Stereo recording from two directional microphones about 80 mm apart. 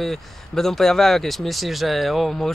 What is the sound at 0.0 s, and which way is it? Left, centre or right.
Speech, centre.